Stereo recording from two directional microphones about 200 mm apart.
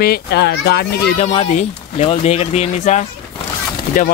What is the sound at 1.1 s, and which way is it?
Speech, 30° left (ahead or behind).